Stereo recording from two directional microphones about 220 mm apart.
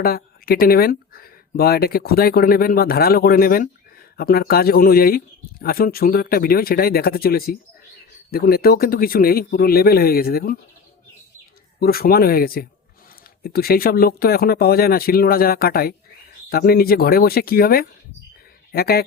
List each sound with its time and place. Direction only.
0.0 s speech: 45° left (ahead or behind)
11.8 s speech: 45° left (ahead or behind)